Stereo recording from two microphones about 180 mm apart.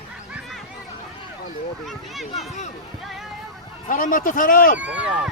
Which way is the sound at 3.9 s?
50° left (ahead or behind).